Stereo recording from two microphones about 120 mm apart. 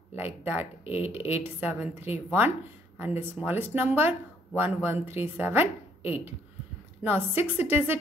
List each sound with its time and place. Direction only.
0.1 s a woman's voice: 15° right (ahead or behind)